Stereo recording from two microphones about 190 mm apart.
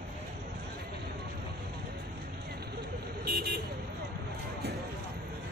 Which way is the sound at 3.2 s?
50° right (ahead or behind).